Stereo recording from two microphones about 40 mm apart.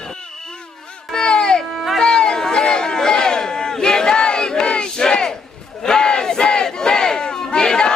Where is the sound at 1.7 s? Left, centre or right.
Centre.